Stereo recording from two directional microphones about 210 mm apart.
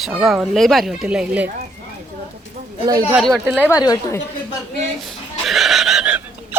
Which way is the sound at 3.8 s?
15° left (ahead or behind).